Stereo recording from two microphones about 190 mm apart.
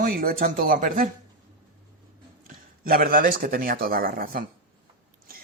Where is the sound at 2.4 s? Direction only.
50° right (ahead or behind).